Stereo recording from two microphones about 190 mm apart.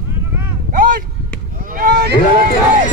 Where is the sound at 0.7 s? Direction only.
50° right (ahead or behind).